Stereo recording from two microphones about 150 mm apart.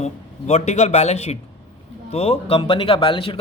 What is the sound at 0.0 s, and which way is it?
Speech, 45° left (ahead or behind).